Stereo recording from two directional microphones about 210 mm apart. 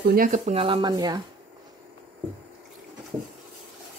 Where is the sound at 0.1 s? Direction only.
40° right (ahead or behind); by 1.2 s 20° right (ahead or behind).